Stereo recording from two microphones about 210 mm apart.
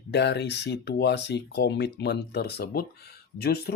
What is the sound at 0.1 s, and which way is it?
Speech, 55° left (ahead or behind).